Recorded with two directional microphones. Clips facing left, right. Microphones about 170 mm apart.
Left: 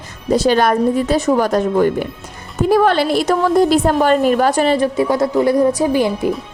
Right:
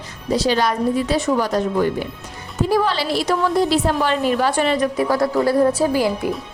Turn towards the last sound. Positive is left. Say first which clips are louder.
# left 3 dB
turn(degrees=20)  # may be behind; listen again after turning